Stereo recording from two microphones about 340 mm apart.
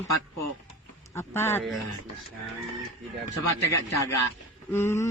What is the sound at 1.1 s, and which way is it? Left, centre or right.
Speech, centre.